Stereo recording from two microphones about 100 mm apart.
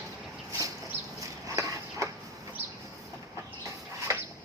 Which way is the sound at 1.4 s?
30° right (ahead or behind).